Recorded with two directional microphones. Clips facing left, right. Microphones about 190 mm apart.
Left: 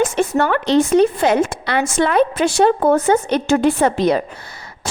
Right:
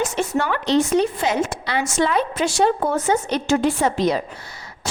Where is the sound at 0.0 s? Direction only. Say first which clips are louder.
Left 5 dB; 55° left (ahead or behind).